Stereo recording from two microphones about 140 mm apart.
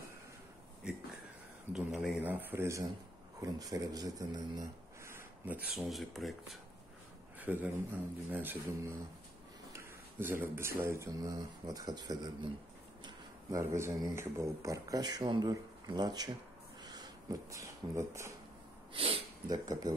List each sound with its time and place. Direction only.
1.7 s speech: 5° right (ahead or behind)
5.8 s speech: centre (ahead or behind)
7.3 s speech: 10° right (ahead or behind)
18.9 s a sound: 45° right (ahead or behind)
19.5 s speech: 25° right (ahead or behind)